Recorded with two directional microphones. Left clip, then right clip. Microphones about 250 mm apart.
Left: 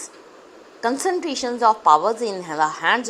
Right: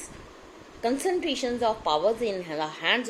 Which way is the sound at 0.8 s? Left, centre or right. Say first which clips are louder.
Left 4 dB; left.